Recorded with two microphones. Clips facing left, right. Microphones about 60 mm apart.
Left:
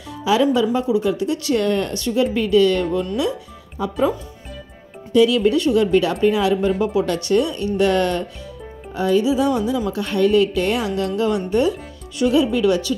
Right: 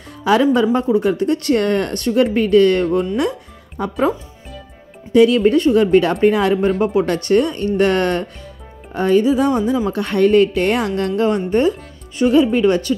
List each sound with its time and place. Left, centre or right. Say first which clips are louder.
0.2 s a woman's voice: right 3 dB; right
5.1 s a woman's voice: right 3 dB; right